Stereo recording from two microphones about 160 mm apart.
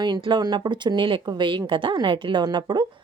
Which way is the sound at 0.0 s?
30° right (ahead or behind).